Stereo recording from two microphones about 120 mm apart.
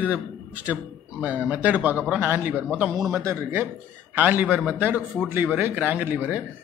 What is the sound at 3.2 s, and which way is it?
A man's voice, 20° right (ahead or behind).